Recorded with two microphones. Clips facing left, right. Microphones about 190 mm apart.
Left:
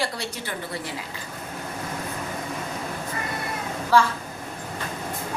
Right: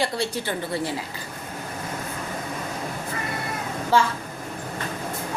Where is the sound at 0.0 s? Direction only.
30° right (ahead or behind).